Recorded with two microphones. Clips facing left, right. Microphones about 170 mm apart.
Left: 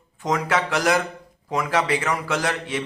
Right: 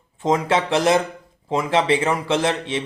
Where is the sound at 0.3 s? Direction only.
25° right (ahead or behind).